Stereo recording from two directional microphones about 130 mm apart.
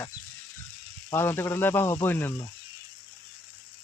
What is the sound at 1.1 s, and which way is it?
Speech, 20° left (ahead or behind).